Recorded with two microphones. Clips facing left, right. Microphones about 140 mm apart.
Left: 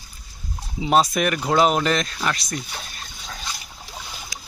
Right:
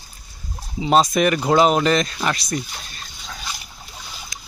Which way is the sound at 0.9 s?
5° left (ahead or behind).